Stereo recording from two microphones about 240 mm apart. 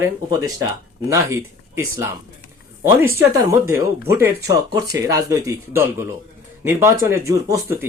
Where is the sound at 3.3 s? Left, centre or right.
Centre.